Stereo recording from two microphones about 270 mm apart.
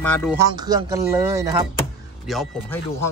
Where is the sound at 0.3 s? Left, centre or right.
Centre.